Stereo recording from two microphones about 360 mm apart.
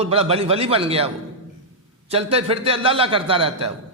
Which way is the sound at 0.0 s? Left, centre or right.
Centre.